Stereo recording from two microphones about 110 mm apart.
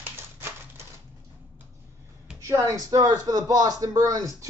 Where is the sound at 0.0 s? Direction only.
20° right (ahead or behind).